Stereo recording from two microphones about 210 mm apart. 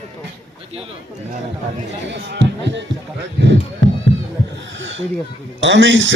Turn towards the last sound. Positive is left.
turn(degrees=-60)  # may be behind; listen again after turning